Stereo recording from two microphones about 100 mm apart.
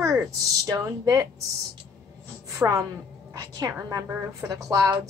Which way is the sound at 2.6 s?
35° right (ahead or behind).